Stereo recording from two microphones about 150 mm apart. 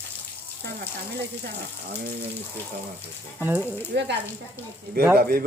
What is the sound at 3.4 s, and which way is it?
Speech, 15° right (ahead or behind).